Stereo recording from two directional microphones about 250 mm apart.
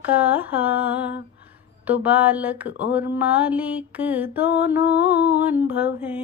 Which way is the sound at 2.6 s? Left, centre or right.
Left.